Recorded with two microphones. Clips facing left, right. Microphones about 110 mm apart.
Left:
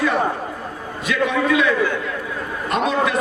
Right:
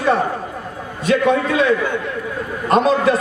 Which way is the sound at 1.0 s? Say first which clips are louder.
Right 4 dB; 35° right (ahead or behind).